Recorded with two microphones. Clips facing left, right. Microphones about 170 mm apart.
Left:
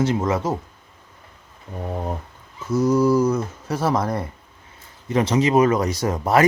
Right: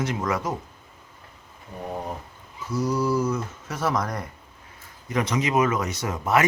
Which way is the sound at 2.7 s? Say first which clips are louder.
Left 7 dB; 45° left (ahead or behind).